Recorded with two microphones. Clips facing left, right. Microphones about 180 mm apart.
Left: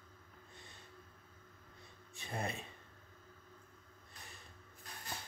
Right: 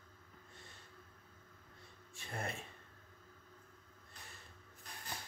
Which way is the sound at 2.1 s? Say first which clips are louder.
Left 2 dB; 20° left (ahead or behind).